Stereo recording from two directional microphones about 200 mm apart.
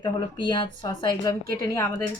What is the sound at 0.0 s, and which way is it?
A woman's voice, 25° left (ahead or behind).